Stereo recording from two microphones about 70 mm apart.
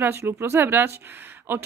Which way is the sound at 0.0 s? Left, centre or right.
Right.